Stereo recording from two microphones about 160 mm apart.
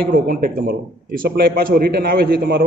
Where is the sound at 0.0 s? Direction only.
65° right (ahead or behind).